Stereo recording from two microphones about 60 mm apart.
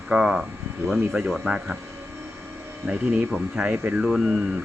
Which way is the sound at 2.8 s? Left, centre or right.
Centre.